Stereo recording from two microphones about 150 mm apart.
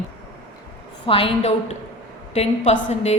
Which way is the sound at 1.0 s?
35° left (ahead or behind).